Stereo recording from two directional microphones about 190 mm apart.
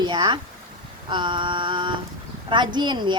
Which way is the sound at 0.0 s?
20° right (ahead or behind).